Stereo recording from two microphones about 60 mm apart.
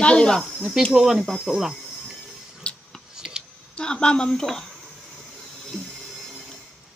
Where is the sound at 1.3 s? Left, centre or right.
Centre.